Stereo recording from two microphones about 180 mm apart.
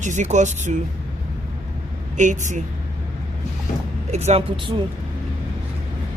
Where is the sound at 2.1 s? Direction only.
45° right (ahead or behind).